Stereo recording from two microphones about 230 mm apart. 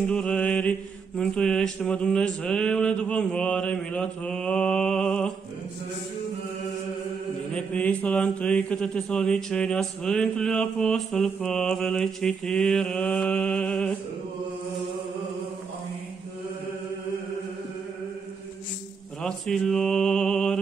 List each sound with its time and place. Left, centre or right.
0.0 s speech: centre
7.5 s speech: centre
19.2 s speech: centre